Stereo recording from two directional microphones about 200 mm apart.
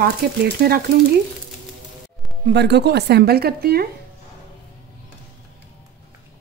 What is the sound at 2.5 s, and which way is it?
A woman's voice, 55° right (ahead or behind).